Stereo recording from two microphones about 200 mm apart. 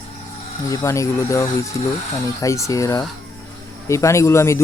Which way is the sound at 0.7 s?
15° left (ahead or behind).